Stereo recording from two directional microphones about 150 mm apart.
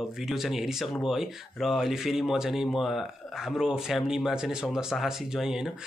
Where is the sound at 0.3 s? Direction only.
Centre (ahead or behind).